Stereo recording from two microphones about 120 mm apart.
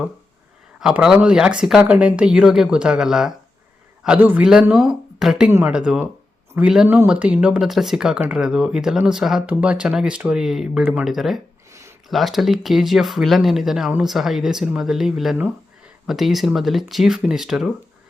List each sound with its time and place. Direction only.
0.8 s speech: 5° right (ahead or behind)
5.5 s speech: 20° right (ahead or behind)
5.7 s speech: 10° right (ahead or behind)
6.8 s speech: 20° right (ahead or behind); by 11.3 s centre (ahead or behind)
11.7 s a sound: 25° right (ahead or behind)
12.0 s speech: centre (ahead or behind)